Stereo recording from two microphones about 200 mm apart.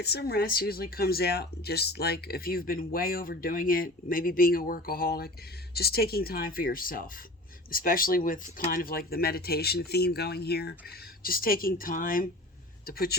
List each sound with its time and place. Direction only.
0.0 s speech: 55° left (ahead or behind)